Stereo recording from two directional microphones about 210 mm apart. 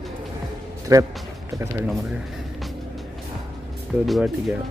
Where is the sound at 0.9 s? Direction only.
15° right (ahead or behind).